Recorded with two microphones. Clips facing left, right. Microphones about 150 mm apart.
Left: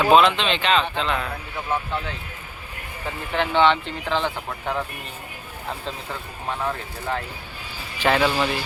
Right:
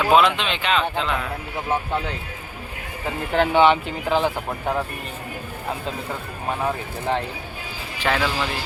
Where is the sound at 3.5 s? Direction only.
10° right (ahead or behind).